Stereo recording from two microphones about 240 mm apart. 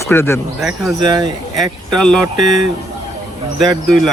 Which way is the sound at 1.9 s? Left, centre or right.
Centre.